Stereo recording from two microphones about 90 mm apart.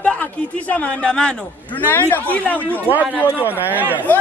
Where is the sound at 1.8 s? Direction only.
20° left (ahead or behind).